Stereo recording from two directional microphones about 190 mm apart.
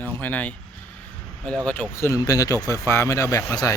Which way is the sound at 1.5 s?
5° left (ahead or behind).